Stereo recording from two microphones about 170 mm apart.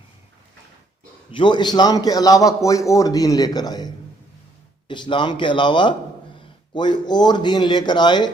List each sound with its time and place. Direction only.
1.3 s a man's voice: 30° left (ahead or behind)